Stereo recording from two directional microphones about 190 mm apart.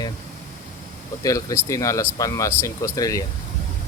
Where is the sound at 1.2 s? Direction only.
15° left (ahead or behind).